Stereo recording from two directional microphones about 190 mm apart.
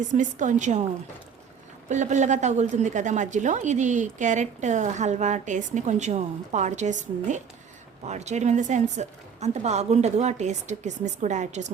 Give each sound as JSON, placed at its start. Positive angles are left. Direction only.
{"t": 0.1, "sound": "a woman's voice", "side_deg": -40}
{"t": 1.9, "sound": "a woman's voice", "side_deg": -40}